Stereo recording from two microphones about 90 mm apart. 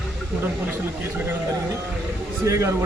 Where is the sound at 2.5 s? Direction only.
35° right (ahead or behind).